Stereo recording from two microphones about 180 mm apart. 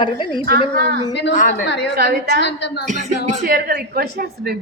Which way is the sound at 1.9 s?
60° right (ahead or behind).